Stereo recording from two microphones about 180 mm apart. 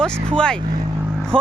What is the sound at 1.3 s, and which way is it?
Speech, 30° right (ahead or behind).